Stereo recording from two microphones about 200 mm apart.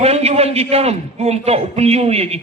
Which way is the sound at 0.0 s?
30° right (ahead or behind).